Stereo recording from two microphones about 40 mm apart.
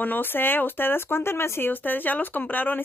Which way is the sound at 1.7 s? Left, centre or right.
Left.